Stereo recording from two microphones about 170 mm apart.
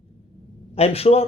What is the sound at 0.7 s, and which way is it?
Speech, 35° left (ahead or behind).